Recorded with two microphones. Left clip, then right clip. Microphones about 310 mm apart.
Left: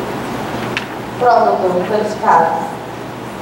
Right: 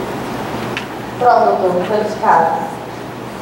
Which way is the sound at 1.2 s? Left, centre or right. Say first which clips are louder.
Even; centre.